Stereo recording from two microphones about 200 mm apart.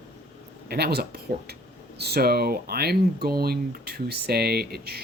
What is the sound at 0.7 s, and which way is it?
Speech, 55° right (ahead or behind).